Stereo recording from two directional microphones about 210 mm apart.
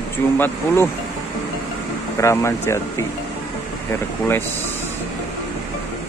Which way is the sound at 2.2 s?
15° left (ahead or behind).